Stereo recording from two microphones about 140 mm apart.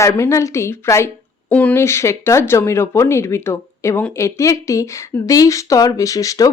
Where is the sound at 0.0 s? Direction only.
20° left (ahead or behind).